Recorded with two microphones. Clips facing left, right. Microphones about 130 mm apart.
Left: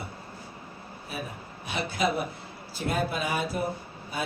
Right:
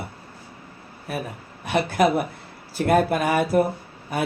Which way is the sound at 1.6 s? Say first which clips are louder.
Right 8 dB; 65° right (ahead or behind).